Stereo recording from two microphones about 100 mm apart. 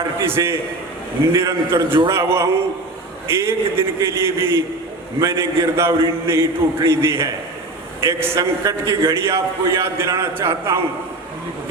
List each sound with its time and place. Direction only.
0.0 s a man's voice: 25° right (ahead or behind)